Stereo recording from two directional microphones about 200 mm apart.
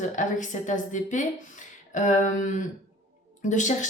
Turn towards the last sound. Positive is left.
turn(degrees=40)  # may be behind; listen again after turning